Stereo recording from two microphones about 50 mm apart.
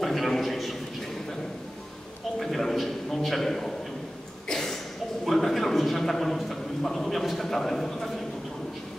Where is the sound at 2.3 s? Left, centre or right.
Centre.